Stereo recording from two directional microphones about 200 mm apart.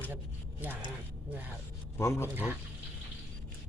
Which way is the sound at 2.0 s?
15° left (ahead or behind).